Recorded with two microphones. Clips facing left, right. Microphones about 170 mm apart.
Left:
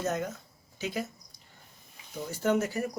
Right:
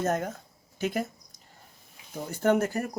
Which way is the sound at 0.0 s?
50° right (ahead or behind).